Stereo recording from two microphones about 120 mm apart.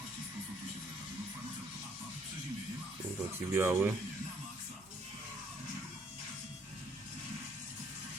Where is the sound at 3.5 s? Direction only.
20° right (ahead or behind).